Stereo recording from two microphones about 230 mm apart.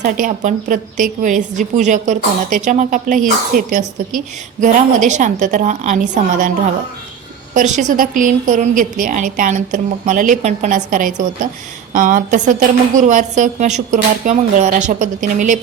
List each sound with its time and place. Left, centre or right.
0.0 s a woman's voice: right
7.5 s a woman's voice: right